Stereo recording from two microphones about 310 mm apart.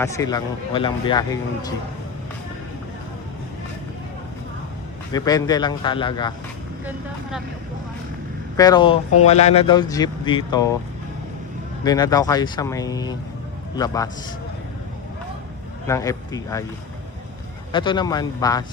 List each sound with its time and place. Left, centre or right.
0.0 s speech: centre
5.1 s speech: centre
6.8 s speech: centre
8.5 s speech: centre
11.9 s speech: centre
15.9 s speech: centre
17.7 s speech: centre